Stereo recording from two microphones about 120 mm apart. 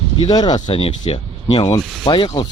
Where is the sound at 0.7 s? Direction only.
50° left (ahead or behind).